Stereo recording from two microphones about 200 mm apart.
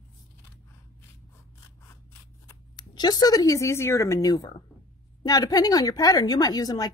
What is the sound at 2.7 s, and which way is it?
A woman's voice, 20° left (ahead or behind).